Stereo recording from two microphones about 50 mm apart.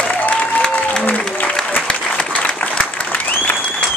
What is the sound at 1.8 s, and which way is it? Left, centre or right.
Applause, left.